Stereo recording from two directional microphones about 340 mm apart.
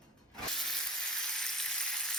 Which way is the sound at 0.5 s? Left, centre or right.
Centre.